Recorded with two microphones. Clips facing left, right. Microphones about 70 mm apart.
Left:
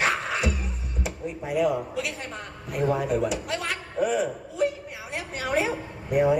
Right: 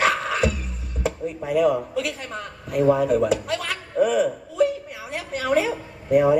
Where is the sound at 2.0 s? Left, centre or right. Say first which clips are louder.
Right 4 dB; left.